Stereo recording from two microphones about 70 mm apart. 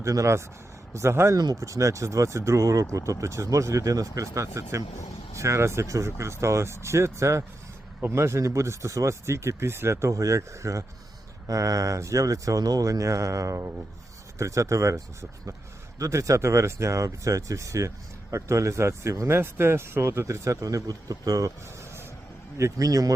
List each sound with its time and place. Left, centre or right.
0.0 s speech: right
22.5 s a man's voice: right